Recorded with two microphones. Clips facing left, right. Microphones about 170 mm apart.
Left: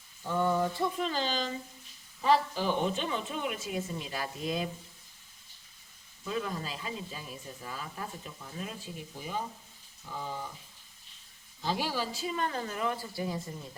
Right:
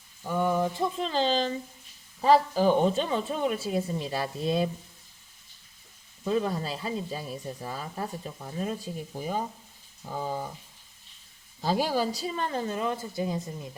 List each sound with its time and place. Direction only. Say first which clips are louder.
0.2 s speech: right 2 dB; 15° right (ahead or behind); by 4.7 s 30° right (ahead or behind)
6.2 s speech: right 7 dB; 35° right (ahead or behind)
11.6 s speech: right 6 dB; 40° right (ahead or behind); by 13.7 s 20° right (ahead or behind)